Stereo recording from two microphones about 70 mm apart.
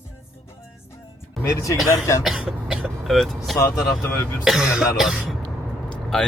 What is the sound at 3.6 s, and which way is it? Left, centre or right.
Speech, left.